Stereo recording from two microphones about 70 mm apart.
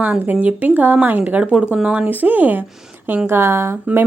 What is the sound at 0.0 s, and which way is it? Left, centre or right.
Speech, right.